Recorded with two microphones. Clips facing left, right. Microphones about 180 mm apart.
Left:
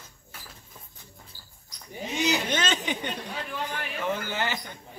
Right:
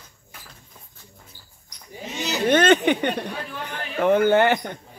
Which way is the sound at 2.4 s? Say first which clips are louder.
Right 12 dB; 60° right (ahead or behind).